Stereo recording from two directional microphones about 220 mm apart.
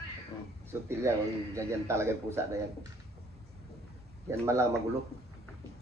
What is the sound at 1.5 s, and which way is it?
A man's voice, 10° right (ahead or behind).